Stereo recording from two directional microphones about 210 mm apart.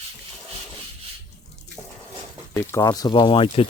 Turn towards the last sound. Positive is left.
turn(degrees=25)  # may be behind; listen again after turning